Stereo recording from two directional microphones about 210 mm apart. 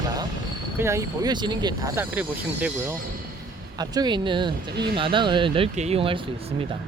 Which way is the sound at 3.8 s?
20° right (ahead or behind).